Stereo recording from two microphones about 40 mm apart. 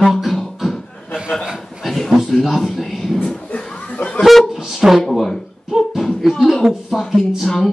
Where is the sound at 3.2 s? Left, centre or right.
Left.